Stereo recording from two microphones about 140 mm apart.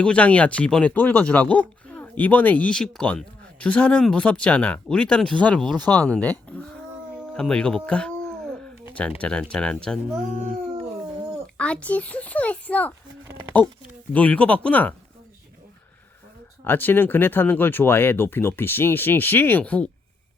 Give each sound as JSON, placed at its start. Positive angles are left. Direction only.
{"t": 0.0, "sound": "speech", "side_deg": 10}
{"t": 7.3, "sound": "speech", "side_deg": 5}
{"t": 11.5, "sound": "speech", "side_deg": 10}
{"t": 14.1, "sound": "speech", "side_deg": 10}
{"t": 16.6, "sound": "speech", "side_deg": 15}